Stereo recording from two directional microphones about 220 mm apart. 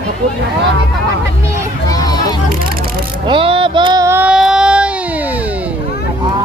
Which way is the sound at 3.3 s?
25° right (ahead or behind).